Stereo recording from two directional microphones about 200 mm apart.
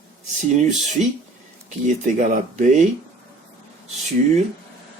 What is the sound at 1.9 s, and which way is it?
Speech, 40° right (ahead or behind).